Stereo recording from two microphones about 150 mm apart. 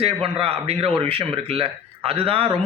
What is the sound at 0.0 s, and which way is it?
A man's voice, 40° right (ahead or behind).